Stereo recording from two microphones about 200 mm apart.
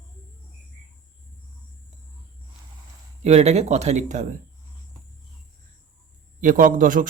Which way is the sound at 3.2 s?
35° right (ahead or behind).